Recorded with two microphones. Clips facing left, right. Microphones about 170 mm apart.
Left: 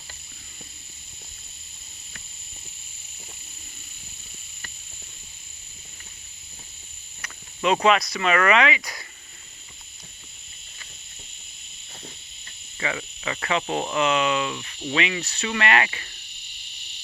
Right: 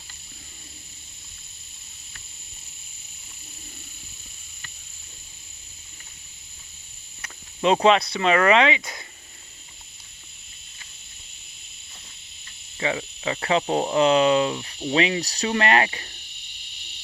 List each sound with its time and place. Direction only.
7.2 s speech: 30° right (ahead or behind)
12.7 s speech: 25° right (ahead or behind)
14.9 s cricket: 35° right (ahead or behind)